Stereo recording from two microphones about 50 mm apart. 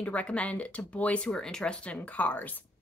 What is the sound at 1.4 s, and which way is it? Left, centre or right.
Speech, centre.